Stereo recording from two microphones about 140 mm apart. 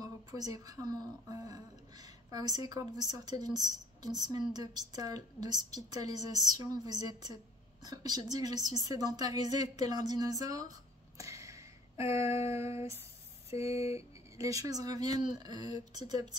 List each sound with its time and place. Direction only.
0.0 s speech: 25° right (ahead or behind)
11.1 s a sound: 20° right (ahead or behind)
13.6 s speech: 20° right (ahead or behind)